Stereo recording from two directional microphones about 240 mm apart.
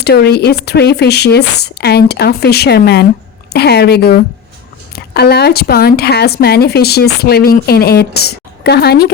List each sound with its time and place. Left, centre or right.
0.0 s speech: left